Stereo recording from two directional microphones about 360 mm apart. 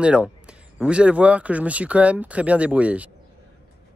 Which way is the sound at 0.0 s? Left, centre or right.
Centre.